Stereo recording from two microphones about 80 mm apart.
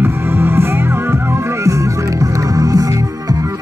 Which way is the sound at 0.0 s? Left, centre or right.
Right.